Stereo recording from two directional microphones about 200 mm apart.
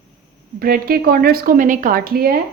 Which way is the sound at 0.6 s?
50° right (ahead or behind).